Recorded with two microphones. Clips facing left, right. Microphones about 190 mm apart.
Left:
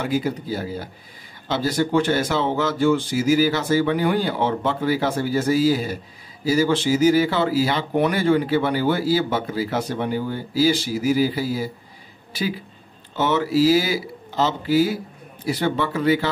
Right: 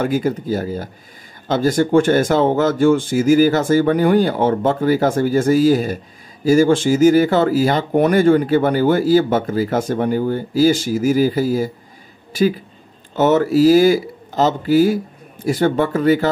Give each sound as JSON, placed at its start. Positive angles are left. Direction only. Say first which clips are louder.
{"t": 0.0, "sound": "speech", "louder": "right 5 dB", "side_deg": -50}
{"t": 13.1, "sound": "speech", "louder": "right 6 dB", "side_deg": -45}